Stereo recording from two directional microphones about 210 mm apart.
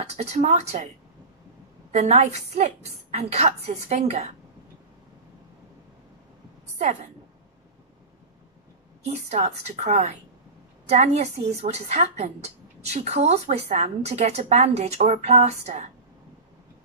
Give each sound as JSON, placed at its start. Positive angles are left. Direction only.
{"t": 0.0, "sound": "a woman's voice", "side_deg": -30}
{"t": 1.9, "sound": "a woman's voice", "side_deg": -30}
{"t": 6.8, "sound": "a woman's voice", "side_deg": -35}
{"t": 9.0, "sound": "a woman's voice", "side_deg": -30}